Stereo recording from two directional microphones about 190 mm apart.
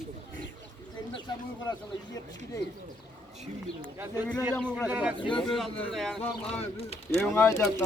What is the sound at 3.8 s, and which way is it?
A man's voice, 10° right (ahead or behind).